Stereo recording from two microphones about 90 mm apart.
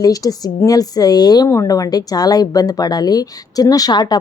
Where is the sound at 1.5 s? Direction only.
40° left (ahead or behind).